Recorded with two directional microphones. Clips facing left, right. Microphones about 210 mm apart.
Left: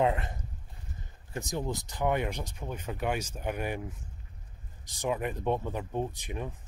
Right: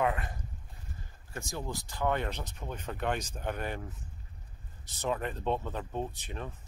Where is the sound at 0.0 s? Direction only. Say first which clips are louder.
Left 3 dB; 25° left (ahead or behind).